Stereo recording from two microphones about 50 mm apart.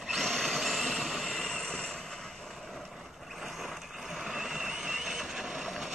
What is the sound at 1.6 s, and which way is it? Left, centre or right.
Vehicle, centre.